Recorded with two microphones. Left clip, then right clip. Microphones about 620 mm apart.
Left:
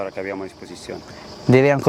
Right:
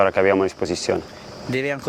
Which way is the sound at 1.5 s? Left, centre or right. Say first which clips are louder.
Left 9 dB; left.